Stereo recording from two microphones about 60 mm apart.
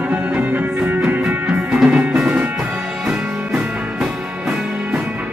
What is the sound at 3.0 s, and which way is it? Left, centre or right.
Music, centre.